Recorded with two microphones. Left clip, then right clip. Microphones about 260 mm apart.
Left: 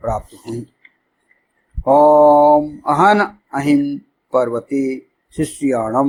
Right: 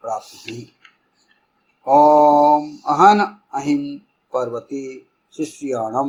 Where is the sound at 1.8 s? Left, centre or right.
Left.